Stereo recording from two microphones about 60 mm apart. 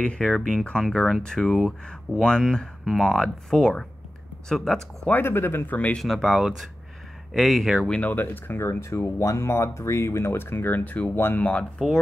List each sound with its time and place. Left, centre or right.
0.0 s speech: centre
5.1 s speech: left
5.7 s speech: left
5.9 s speech: centre
7.8 s speech: left
8.1 s speech: left